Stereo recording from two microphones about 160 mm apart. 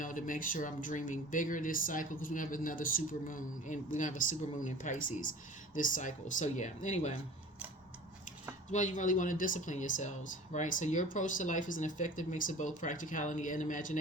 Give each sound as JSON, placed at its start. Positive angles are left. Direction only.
{"t": 0.0, "sound": "speech", "side_deg": 55}
{"t": 8.7, "sound": "speech", "side_deg": 50}